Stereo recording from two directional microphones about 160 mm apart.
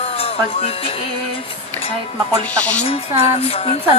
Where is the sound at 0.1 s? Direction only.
40° left (ahead or behind).